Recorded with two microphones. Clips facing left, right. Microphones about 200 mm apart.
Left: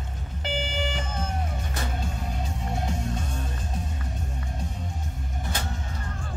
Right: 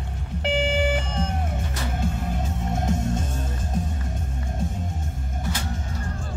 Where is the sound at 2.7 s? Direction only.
45° right (ahead or behind).